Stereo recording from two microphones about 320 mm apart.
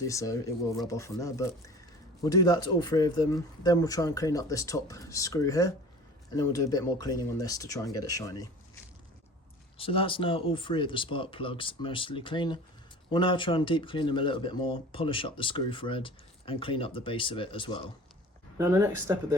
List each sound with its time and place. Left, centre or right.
0.1 s speech: centre
9.7 s speech: centre
18.5 s speech: centre